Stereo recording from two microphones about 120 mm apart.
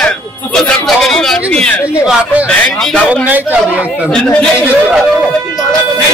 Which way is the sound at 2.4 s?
5° left (ahead or behind).